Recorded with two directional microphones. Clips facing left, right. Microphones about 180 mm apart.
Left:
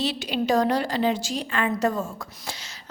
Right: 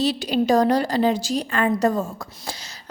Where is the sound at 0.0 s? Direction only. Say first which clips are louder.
Right 5 dB; 40° right (ahead or behind).